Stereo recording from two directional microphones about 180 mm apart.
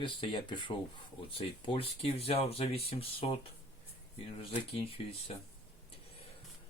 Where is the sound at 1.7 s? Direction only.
30° left (ahead or behind).